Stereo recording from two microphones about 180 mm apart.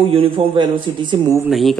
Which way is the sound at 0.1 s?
30° right (ahead or behind).